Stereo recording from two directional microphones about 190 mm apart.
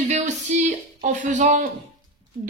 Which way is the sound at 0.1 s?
35° right (ahead or behind).